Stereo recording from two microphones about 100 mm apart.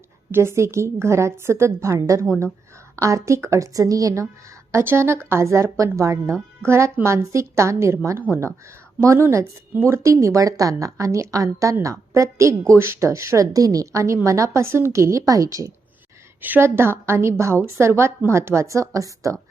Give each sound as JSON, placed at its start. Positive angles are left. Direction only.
{"t": 0.3, "sound": "a woman's voice", "side_deg": -25}
{"t": 16.4, "sound": "a woman's voice", "side_deg": -20}